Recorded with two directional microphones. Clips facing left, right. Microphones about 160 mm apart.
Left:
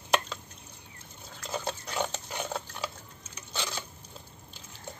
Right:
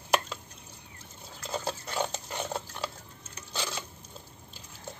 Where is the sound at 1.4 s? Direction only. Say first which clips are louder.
Right 1 dB; 5° right (ahead or behind).